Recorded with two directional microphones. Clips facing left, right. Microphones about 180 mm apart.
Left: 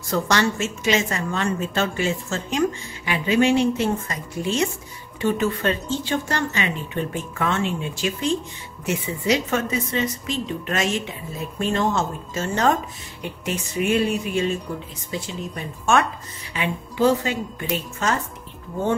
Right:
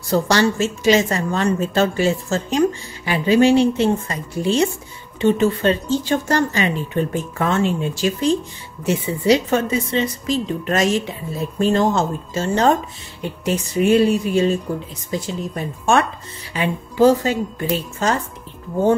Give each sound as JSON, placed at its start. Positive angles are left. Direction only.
{"t": 0.1, "sound": "speech", "side_deg": -35}